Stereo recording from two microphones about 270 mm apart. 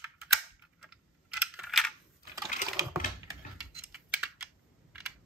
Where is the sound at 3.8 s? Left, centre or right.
Centre.